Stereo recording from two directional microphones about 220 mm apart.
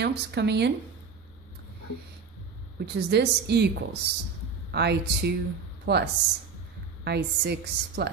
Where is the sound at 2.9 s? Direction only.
50° right (ahead or behind).